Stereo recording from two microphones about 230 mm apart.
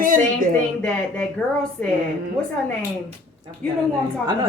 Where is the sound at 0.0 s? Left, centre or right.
Right.